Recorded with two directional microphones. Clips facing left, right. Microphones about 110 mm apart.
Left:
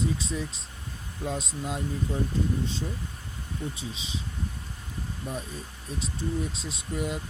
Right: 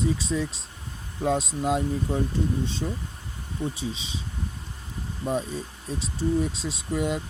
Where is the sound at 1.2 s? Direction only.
80° right.